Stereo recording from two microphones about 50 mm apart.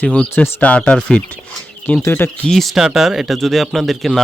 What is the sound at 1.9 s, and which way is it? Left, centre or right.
Speech, left.